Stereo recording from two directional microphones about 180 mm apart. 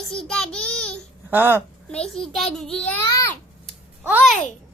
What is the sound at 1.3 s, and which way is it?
Speech, 10° right (ahead or behind).